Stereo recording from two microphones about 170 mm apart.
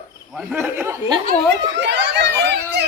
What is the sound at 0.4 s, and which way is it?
Speech, 15° right (ahead or behind).